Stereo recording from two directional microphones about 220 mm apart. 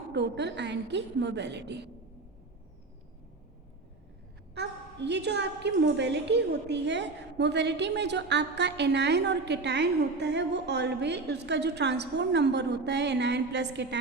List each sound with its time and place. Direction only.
0.1 s a woman's voice: 50° right (ahead or behind)
4.5 s a woman's voice: 50° right (ahead or behind)